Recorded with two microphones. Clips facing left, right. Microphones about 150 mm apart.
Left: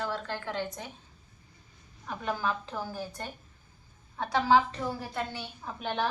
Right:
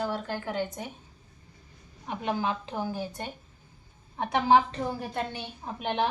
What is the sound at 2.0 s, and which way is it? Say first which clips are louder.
A woman's voice: right 2 dB; 20° right (ahead or behind).